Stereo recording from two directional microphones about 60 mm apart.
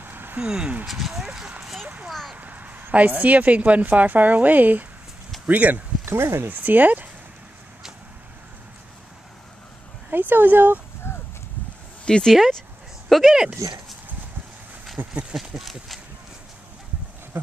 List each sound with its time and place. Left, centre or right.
0.0 s a sound: right
0.4 s speech: centre
0.8 s speech: centre
2.3 s a woman's voice: right
10.0 s speech: right
11.1 s clip-clop: left
12.0 s speech: centre
15.0 s speech: right
15.5 s speech: centre